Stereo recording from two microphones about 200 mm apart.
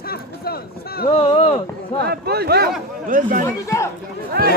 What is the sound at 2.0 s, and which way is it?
Speech, 55° right (ahead or behind).